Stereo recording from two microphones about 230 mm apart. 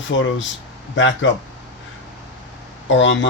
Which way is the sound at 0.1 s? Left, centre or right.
Left.